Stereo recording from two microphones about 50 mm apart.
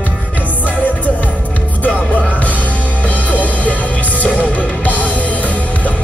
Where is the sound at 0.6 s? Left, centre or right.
Left.